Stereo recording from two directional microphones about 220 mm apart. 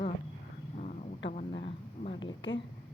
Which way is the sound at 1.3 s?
30° left (ahead or behind).